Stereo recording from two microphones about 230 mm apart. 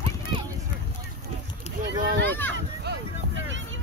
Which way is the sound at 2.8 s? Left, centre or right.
Right.